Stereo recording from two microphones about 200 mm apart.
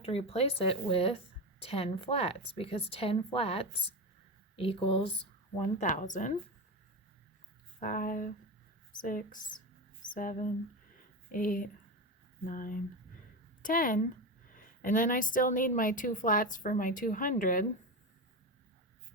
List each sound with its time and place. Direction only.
0.0 s speech: 30° left (ahead or behind)
5.8 s a woman's voice: 40° left (ahead or behind)
7.8 s a woman's voice: 45° left (ahead or behind)